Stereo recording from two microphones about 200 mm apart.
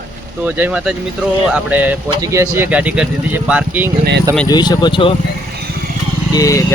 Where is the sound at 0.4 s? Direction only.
10° right (ahead or behind).